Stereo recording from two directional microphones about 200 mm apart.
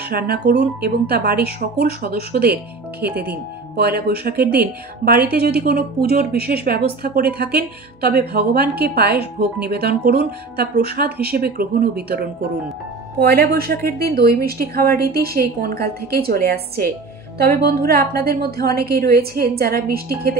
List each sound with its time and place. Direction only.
0.1 s a woman's voice: 50° right (ahead or behind)